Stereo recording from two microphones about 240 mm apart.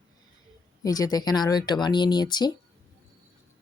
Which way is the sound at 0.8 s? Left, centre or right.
Centre.